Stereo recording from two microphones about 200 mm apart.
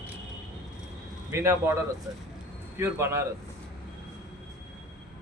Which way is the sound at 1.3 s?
15° right (ahead or behind).